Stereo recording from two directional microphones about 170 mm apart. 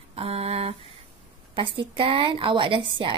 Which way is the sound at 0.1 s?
35° right (ahead or behind).